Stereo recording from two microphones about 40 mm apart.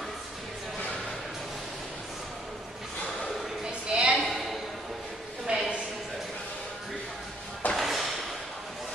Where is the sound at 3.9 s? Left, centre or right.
Right.